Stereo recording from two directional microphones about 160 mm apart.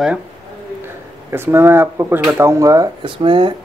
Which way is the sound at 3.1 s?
30° right (ahead or behind).